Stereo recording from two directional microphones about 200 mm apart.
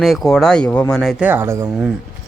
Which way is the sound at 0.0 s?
Centre (ahead or behind).